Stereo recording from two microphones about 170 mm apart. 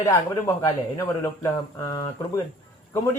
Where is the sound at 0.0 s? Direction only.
20° left (ahead or behind).